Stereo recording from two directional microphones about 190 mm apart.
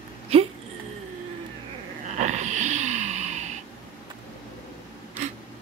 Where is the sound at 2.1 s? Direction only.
40° right (ahead or behind).